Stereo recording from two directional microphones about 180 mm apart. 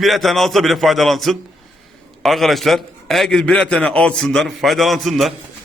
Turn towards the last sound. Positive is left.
turn(degrees=0)  # may be behind; listen again after turning